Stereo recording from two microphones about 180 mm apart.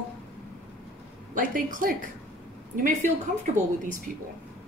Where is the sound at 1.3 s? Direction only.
50° right (ahead or behind).